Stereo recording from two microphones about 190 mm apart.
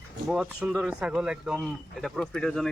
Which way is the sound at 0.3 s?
Centre (ahead or behind).